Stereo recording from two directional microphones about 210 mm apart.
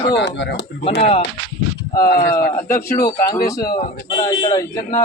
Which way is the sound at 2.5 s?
15° left (ahead or behind).